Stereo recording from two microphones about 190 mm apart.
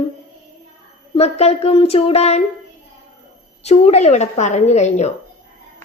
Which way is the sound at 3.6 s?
35° left (ahead or behind).